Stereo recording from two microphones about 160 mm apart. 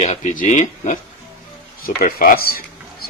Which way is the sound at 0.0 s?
45° left (ahead or behind).